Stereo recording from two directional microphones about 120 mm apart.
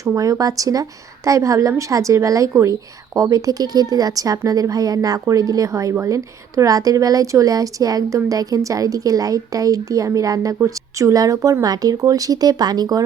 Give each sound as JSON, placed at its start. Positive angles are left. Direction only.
{"t": 0.0, "sound": "a woman's voice", "side_deg": -25}